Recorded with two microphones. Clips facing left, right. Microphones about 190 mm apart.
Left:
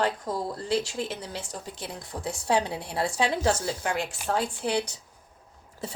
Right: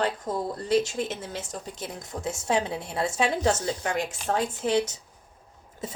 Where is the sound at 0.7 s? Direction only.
20° right (ahead or behind).